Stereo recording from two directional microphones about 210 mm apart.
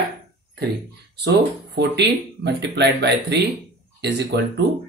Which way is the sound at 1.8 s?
55° right (ahead or behind).